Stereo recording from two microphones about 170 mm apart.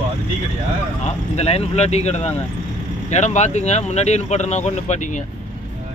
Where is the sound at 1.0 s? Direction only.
40° left (ahead or behind).